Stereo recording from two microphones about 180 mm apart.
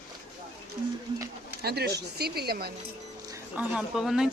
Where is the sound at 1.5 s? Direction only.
60° right (ahead or behind).